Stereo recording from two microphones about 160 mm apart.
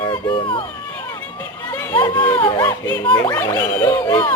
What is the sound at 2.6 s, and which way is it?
Music, 10° left (ahead or behind).